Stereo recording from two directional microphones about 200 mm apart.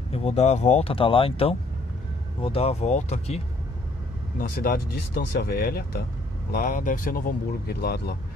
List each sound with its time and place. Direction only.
0.1 s speech: 30° left (ahead or behind)
4.4 s speech: 45° left (ahead or behind)